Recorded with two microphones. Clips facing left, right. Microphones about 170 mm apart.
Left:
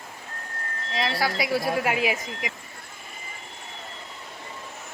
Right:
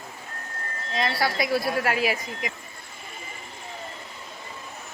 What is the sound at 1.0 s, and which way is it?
Speech, 10° left (ahead or behind).